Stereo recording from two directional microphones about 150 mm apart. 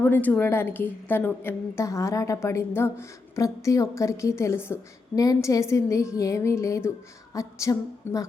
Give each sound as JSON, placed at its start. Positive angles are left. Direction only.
{"t": 0.0, "sound": "a woman's voice", "side_deg": 10}